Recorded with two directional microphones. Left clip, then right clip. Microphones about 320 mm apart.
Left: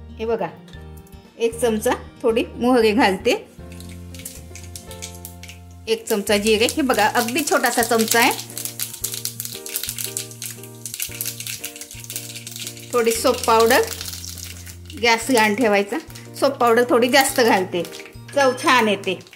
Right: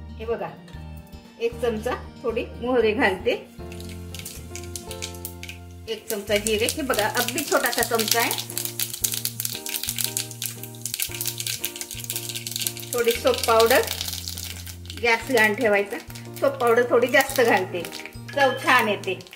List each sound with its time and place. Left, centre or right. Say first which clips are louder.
1.4 s speech: left 5 dB; left
5.9 s speech: left 6 dB; left
8.7 s music: right 3 dB; centre
12.6 s sizzle: right 4 dB; centre
12.9 s speech: left 3 dB; left
15.0 s speech: left 3 dB; left